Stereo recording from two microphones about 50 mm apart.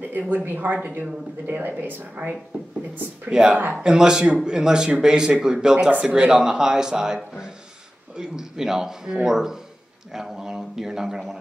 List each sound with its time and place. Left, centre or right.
0.1 s a woman's voice: right
3.3 s speech: centre
8.2 s speech: centre